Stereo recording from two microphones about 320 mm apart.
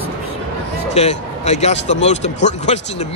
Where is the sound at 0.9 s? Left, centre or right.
Left.